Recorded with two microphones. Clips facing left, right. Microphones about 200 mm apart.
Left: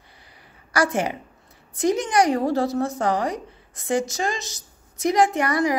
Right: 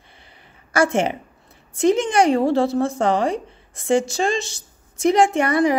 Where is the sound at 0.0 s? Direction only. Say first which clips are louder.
Right 2 dB; 25° right (ahead or behind).